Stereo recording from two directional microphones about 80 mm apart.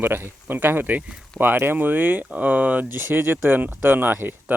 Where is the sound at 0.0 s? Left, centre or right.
Right.